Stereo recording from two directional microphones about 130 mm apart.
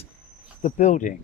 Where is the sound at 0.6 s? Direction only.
70° left (ahead or behind).